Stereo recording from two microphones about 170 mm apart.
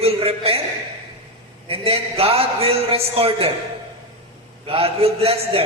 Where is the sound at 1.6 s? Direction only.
35° right (ahead or behind).